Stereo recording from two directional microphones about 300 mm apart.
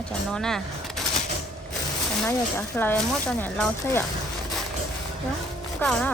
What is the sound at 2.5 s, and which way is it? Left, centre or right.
Speech, centre.